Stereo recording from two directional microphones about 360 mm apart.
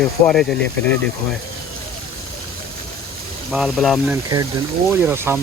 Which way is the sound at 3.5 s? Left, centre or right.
Centre.